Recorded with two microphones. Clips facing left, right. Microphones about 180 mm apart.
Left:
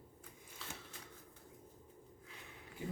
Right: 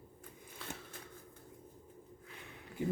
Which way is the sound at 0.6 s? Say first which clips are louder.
Right 5 dB; 55° right (ahead or behind).